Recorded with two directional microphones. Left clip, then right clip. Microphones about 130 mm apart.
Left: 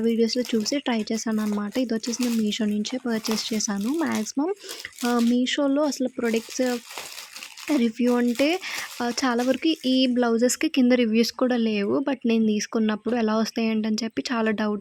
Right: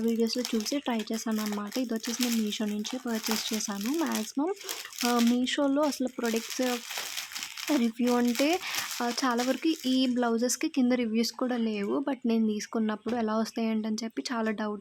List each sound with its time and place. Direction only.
0.0 s speech: 25° left (ahead or behind)
7.8 s speech: 20° left (ahead or behind)